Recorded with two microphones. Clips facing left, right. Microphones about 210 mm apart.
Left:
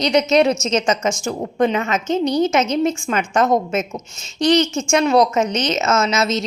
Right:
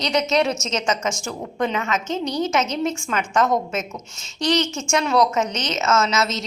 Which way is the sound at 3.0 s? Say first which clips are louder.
Left 3 dB; 25° left (ahead or behind).